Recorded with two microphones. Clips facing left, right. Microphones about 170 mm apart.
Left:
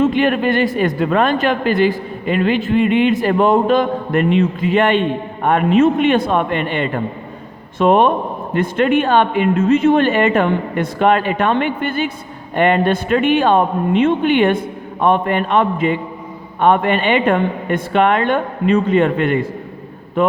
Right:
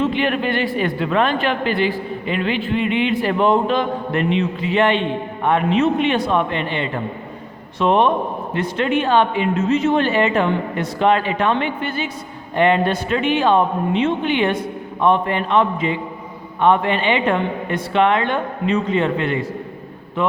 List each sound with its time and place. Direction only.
0.0 s speech: 45° left (ahead or behind)